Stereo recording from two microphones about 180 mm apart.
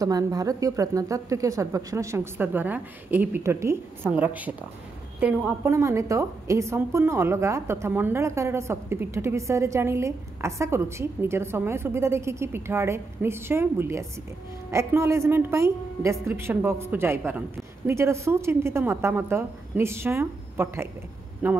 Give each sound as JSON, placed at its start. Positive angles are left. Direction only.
{"t": 0.0, "sound": "a woman's voice", "side_deg": -20}